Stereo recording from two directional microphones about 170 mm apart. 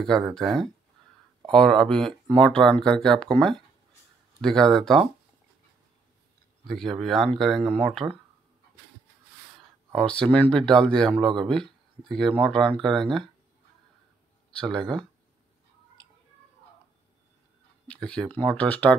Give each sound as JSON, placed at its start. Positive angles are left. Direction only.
{"t": 0.0, "sound": "speech", "side_deg": 0}
{"t": 6.7, "sound": "speech", "side_deg": 0}
{"t": 7.6, "sound": "speech", "side_deg": -35}
{"t": 7.9, "sound": "speech", "side_deg": 0}
{"t": 9.9, "sound": "speech", "side_deg": 5}
{"t": 14.6, "sound": "speech", "side_deg": 5}
{"t": 17.8, "sound": "speech", "side_deg": 5}